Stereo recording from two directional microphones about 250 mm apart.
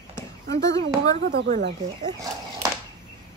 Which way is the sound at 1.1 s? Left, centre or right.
Right.